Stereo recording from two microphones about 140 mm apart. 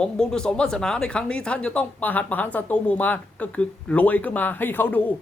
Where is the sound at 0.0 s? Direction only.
5° left (ahead or behind).